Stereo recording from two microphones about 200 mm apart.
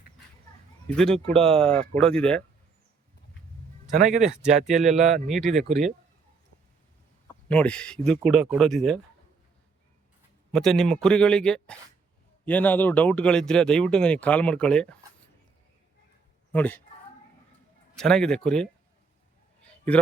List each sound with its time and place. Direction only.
0.9 s speech: 5° left (ahead or behind)
4.3 s speech: 35° right (ahead or behind)
4.6 s speech: centre (ahead or behind)
7.4 s speech: 5° left (ahead or behind)
10.5 s speech: centre (ahead or behind)
16.5 s speech: 10° left (ahead or behind)
17.9 s speech: 5° left (ahead or behind)